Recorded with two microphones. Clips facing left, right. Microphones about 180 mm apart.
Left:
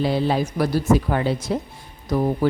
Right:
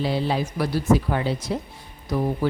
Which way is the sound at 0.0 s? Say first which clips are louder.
Left 3 dB; 50° left (ahead or behind).